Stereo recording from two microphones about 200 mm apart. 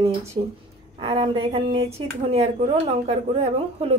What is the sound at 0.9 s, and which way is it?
Speech, 30° right (ahead or behind).